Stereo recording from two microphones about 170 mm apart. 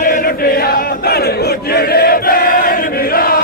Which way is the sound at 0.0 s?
55° left (ahead or behind).